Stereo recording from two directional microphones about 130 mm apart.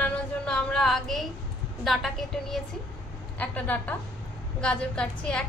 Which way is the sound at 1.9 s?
Centre (ahead or behind).